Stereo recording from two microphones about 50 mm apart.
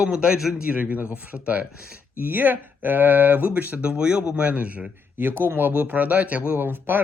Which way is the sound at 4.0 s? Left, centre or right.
Centre.